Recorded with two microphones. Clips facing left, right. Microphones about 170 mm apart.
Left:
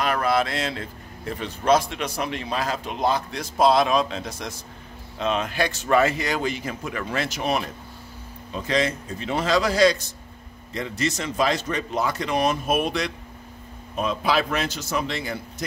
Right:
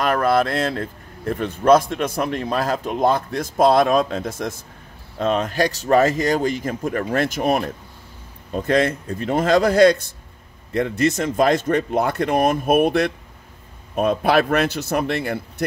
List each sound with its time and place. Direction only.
0.0 s a man's voice: 45° right (ahead or behind)